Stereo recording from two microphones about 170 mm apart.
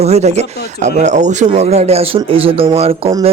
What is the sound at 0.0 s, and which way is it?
Speech, 40° right (ahead or behind).